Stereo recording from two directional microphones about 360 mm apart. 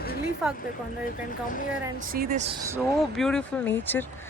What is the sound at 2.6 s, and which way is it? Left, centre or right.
Speech, centre.